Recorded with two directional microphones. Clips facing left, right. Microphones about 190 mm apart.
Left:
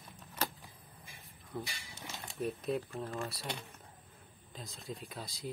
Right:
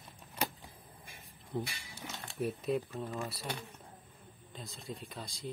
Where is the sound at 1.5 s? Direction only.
20° right (ahead or behind).